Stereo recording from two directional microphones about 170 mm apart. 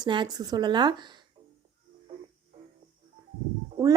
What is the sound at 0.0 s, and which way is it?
A woman's voice, 25° right (ahead or behind).